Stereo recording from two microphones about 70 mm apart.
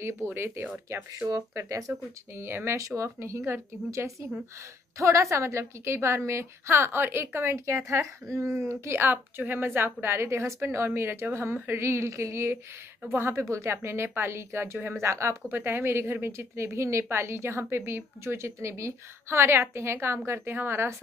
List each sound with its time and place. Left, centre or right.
0.0 s speech: right
2.3 s speech: right
9.0 s a woman's voice: right